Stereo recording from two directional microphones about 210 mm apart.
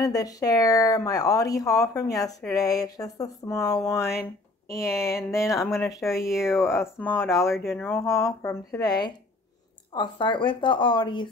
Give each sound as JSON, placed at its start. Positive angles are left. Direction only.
{"t": 0.0, "sound": "speech", "side_deg": 15}
{"t": 5.9, "sound": "speech", "side_deg": 0}
{"t": 6.5, "sound": "speech", "side_deg": 10}